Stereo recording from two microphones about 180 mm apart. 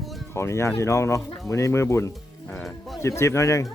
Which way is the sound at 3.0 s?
15° left (ahead or behind).